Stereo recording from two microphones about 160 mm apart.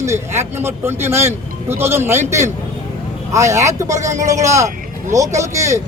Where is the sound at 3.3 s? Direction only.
20° right (ahead or behind).